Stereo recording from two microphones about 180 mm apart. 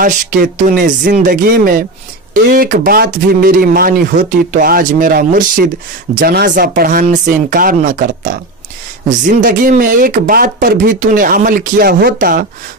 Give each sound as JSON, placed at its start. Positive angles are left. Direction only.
{"t": 0.0, "sound": "speech", "side_deg": -50}
{"t": 6.1, "sound": "speech", "side_deg": -60}